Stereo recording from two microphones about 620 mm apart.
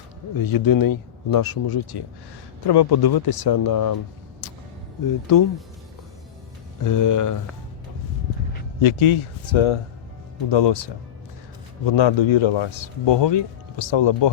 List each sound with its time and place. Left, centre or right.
0.3 s speech: left
5.3 s speech: left
6.8 s speech: left
8.8 s speech: left